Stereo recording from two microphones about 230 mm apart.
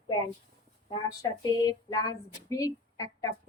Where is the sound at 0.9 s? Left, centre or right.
Centre.